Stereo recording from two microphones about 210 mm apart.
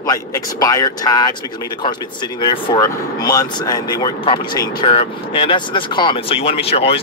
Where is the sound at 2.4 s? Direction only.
20° left (ahead or behind).